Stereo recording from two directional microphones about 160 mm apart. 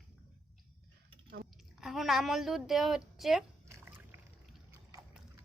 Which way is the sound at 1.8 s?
Centre (ahead or behind).